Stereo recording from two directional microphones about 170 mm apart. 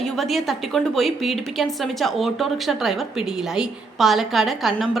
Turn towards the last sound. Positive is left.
turn(degrees=0)  # may be behind; listen again after turning